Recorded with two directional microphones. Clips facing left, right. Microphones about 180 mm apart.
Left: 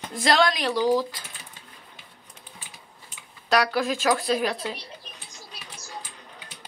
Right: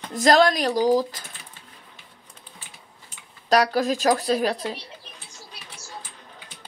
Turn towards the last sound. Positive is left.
turn(degrees=-40)  # may be behind; listen again after turning